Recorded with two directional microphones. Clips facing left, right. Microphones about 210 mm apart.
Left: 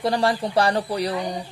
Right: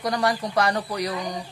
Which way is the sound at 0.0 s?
30° left (ahead or behind).